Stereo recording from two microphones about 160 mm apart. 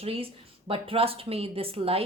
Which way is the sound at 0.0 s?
35° right (ahead or behind).